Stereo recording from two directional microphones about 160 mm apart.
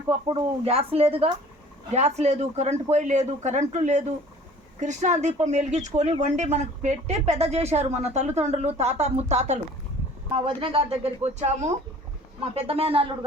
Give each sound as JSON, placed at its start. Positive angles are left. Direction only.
{"t": 0.1, "sound": "speech", "side_deg": -35}